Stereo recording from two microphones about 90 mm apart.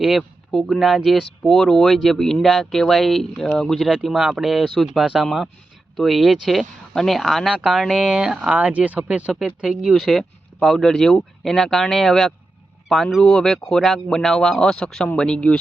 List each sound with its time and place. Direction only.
0.0 s speech: centre (ahead or behind)